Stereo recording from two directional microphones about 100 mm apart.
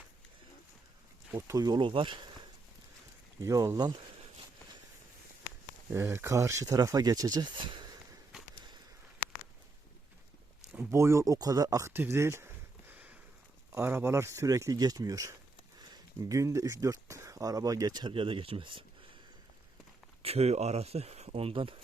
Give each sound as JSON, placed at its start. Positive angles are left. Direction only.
{"t": 1.4, "sound": "speech", "side_deg": -35}
{"t": 1.8, "sound": "speech", "side_deg": -60}
{"t": 3.4, "sound": "speech", "side_deg": -30}
{"t": 5.9, "sound": "speech", "side_deg": -25}
{"t": 7.5, "sound": "a sound", "side_deg": -55}
{"t": 10.9, "sound": "speech", "side_deg": -30}
{"t": 12.9, "sound": "a sound", "side_deg": -15}
{"t": 13.7, "sound": "speech", "side_deg": -25}
{"t": 15.8, "sound": "a sound", "side_deg": -45}
{"t": 16.4, "sound": "speech", "side_deg": -30}
{"t": 18.1, "sound": "speech", "side_deg": -60}
{"t": 20.2, "sound": "speech", "side_deg": -85}